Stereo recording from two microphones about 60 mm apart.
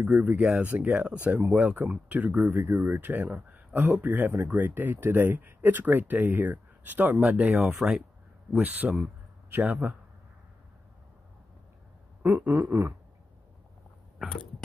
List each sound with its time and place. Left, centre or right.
0.0 s speech: right
0.4 s speech: centre
0.7 s speech: right
2.5 s a sound: right
2.8 s speech: right
7.7 s speech: centre
8.5 s speech: right
12.2 s a sound: right